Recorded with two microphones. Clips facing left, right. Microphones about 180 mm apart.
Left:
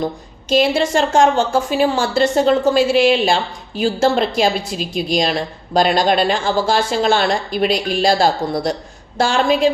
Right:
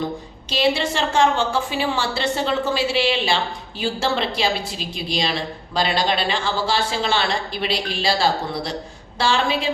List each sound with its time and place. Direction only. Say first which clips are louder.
0.5 s a woman's voice: left 6 dB; 45° left (ahead or behind)